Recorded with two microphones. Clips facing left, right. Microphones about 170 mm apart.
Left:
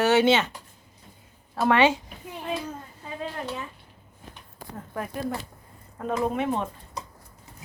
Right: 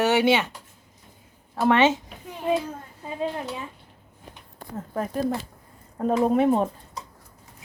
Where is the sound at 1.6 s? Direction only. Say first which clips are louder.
Right 1 dB; 20° right (ahead or behind).